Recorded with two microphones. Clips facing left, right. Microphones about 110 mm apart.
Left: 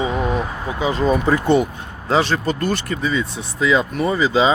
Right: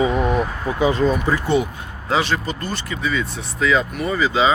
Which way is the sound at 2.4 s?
50° left (ahead or behind).